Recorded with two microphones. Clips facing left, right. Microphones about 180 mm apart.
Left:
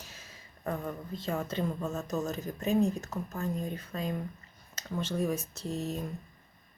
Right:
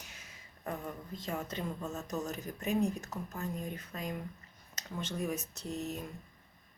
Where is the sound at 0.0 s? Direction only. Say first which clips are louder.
Left 3 dB; 20° right (ahead or behind).